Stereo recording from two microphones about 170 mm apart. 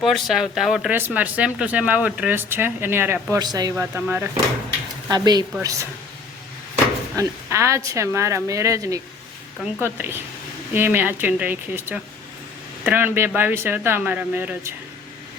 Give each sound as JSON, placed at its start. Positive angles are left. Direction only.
{"t": 0.0, "sound": "speech", "side_deg": 0}
{"t": 5.0, "sound": "speech", "side_deg": -25}
{"t": 7.2, "sound": "speech", "side_deg": -15}